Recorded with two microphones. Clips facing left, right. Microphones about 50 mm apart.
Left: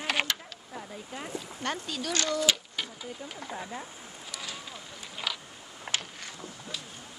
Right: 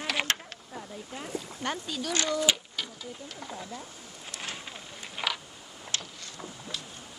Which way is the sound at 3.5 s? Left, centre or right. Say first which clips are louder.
Left 2 dB; left.